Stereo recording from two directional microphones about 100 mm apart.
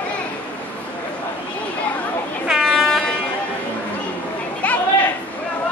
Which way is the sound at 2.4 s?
Centre (ahead or behind).